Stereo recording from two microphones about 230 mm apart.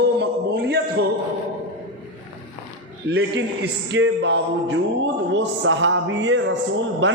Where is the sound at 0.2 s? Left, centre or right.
Right.